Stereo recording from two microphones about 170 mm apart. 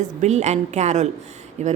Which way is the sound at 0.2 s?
40° right (ahead or behind).